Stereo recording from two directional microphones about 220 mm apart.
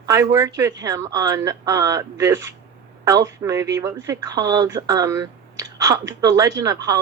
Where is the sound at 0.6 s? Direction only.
15° right (ahead or behind).